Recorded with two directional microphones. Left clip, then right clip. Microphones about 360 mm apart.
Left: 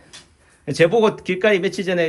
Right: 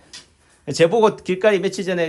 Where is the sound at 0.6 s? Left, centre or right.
Centre.